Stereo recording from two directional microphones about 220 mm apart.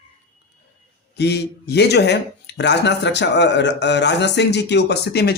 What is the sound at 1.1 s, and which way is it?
Speech, 50° left (ahead or behind).